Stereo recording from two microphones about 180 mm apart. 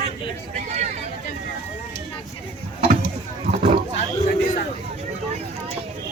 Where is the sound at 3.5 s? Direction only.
35° right (ahead or behind).